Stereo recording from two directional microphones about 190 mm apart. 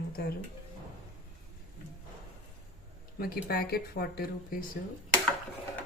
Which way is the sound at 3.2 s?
55° left (ahead or behind).